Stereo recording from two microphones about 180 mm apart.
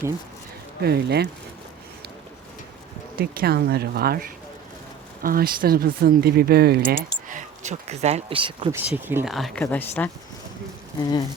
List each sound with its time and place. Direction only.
0.8 s speech: 65° right (ahead or behind)
3.2 s speech: 60° right (ahead or behind); by 8.7 s 30° right (ahead or behind)
8.7 s speech: 10° right (ahead or behind); by 10.1 s 10° left (ahead or behind)